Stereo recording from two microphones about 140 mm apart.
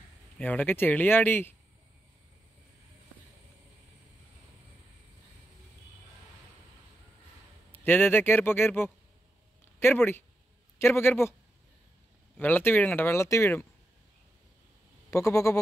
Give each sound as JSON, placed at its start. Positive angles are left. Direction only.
{"t": 0.4, "sound": "speech", "side_deg": 10}
{"t": 7.7, "sound": "speech", "side_deg": 15}
{"t": 12.4, "sound": "speech", "side_deg": 15}
{"t": 15.0, "sound": "a sound", "side_deg": 20}